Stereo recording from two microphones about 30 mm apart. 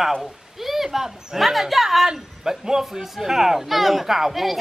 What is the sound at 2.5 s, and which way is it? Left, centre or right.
Speech, centre.